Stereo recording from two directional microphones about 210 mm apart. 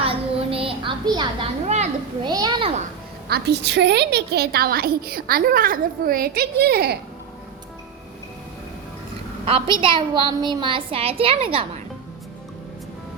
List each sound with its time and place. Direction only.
0.0 s a sound: 25° right (ahead or behind)
2.2 s a woman's voice: 20° right (ahead or behind)
3.2 s a woman's voice: 50° right (ahead or behind)
9.5 s a woman's voice: 25° right (ahead or behind)